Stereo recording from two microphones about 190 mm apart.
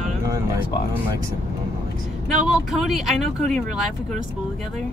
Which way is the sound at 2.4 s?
Centre (ahead or behind).